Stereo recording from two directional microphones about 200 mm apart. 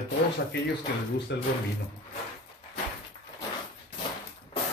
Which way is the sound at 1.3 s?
60° left (ahead or behind).